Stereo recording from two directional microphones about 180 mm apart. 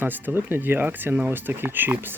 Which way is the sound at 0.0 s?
10° right (ahead or behind).